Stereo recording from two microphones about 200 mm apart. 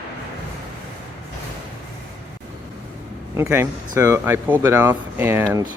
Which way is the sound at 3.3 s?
15° right (ahead or behind).